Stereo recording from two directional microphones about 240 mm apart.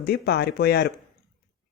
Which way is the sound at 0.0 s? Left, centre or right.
Left.